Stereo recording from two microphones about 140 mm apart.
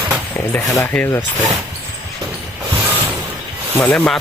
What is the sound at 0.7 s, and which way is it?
Speech, 15° left (ahead or behind).